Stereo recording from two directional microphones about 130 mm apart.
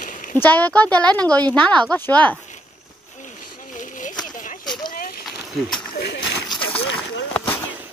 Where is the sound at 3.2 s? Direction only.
75° left (ahead or behind).